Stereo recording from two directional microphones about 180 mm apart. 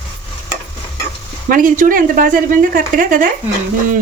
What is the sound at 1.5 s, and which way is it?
Speech, 50° right (ahead or behind).